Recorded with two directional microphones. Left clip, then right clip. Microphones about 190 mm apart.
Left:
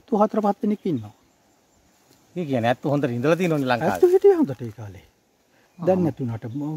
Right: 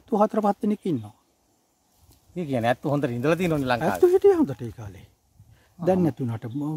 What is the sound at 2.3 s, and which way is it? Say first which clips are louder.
Speech: left 2 dB; 10° right (ahead or behind).